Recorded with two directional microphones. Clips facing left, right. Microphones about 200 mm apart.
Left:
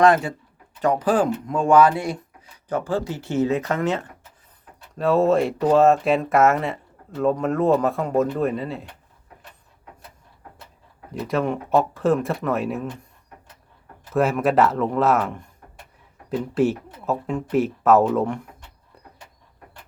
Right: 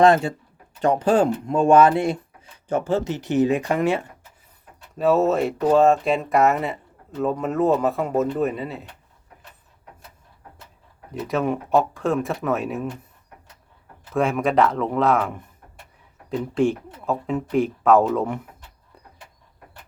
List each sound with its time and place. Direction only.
0.0 s speech: 25° right (ahead or behind); by 8.9 s centre (ahead or behind)
11.1 s speech: centre (ahead or behind)
14.1 s speech: 5° left (ahead or behind)
16.6 s speech: 5° left (ahead or behind)